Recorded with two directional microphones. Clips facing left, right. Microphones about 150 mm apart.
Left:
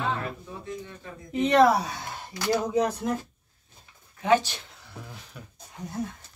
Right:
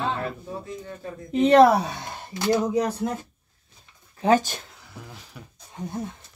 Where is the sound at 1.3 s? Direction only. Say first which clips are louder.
Right 4 dB; 30° right (ahead or behind).